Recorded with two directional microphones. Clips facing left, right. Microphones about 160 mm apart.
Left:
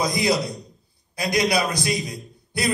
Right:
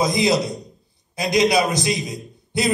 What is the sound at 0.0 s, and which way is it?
A man's voice, 20° right (ahead or behind).